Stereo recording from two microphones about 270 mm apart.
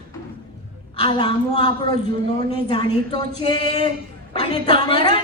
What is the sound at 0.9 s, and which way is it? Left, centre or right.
A woman's voice, centre.